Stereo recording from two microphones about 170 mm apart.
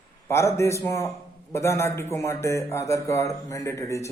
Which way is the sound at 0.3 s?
15° left (ahead or behind).